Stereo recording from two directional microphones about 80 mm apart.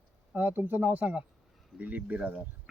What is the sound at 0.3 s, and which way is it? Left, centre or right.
Speech, right.